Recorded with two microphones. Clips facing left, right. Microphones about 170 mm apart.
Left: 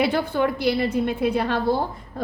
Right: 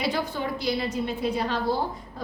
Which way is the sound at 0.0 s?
60° left (ahead or behind).